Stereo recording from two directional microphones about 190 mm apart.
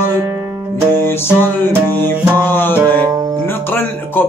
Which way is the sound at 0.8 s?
20° right (ahead or behind).